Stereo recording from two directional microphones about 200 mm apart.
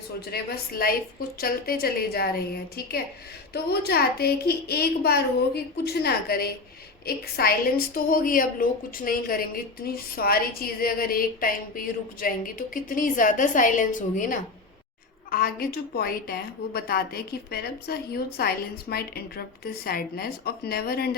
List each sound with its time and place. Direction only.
0.3 s a woman's voice: 50° left (ahead or behind)